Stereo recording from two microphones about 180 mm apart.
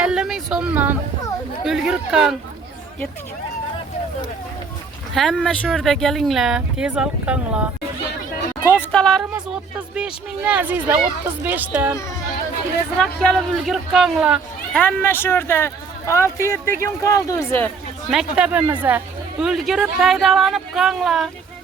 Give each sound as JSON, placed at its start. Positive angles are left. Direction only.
{"t": 0.0, "sound": "a sound", "side_deg": -5}
{"t": 1.6, "sound": "speech", "side_deg": -5}
{"t": 5.1, "sound": "speech", "side_deg": 0}
{"t": 8.7, "sound": "speech", "side_deg": 10}
{"t": 13.1, "sound": "speech", "side_deg": 5}
{"t": 14.7, "sound": "speech", "side_deg": 10}
{"t": 18.1, "sound": "speech", "side_deg": -5}